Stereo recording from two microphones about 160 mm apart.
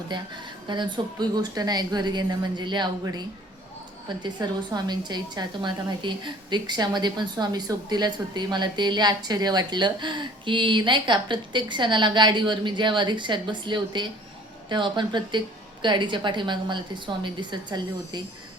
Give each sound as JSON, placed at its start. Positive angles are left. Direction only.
{"t": 0.1, "sound": "a woman's voice", "side_deg": -30}